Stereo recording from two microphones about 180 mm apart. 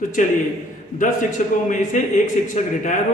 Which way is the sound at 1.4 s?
45° left (ahead or behind).